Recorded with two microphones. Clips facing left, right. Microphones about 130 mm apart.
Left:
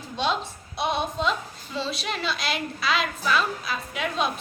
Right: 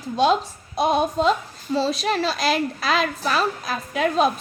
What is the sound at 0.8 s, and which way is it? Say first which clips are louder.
A woman's voice: right 7 dB; 45° right (ahead or behind).